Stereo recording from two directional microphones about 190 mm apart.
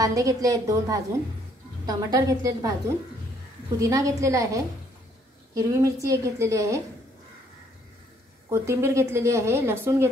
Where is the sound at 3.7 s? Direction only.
15° right (ahead or behind).